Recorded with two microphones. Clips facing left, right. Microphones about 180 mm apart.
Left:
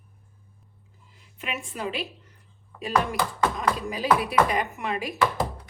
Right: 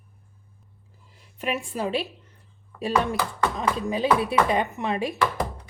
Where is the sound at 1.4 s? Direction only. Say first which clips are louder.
Right 5 dB; 35° right (ahead or behind).